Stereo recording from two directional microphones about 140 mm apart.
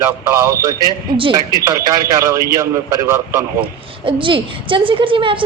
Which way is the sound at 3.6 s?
40° right (ahead or behind).